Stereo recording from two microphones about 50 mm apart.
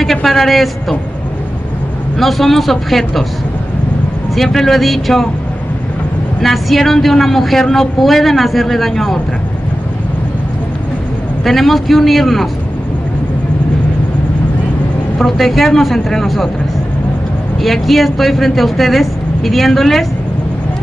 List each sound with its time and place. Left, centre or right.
0.0 s a sound: centre
2.1 s speech: centre
4.4 s speech: centre
6.4 s speech: centre
11.4 s speech: centre
15.2 s speech: centre
17.6 s speech: centre